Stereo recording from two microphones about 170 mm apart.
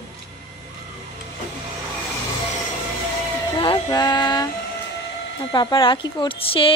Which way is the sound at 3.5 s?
25° left (ahead or behind).